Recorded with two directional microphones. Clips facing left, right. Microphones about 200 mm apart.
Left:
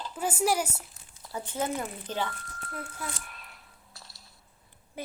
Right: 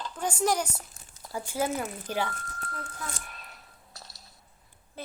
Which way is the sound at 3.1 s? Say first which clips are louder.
Right 2 dB; 40° right (ahead or behind).